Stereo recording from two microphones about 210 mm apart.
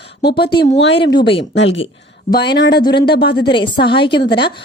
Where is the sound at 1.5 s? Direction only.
65° left (ahead or behind).